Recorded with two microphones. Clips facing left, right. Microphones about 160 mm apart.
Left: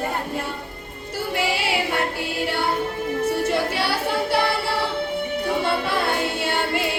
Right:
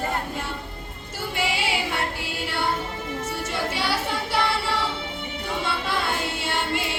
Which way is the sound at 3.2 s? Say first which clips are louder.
Left 8 dB; 60° left (ahead or behind).